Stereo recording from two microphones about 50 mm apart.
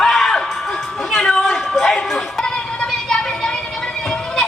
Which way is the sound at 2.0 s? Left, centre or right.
Centre.